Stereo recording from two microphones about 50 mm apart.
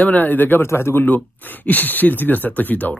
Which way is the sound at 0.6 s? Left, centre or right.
Left.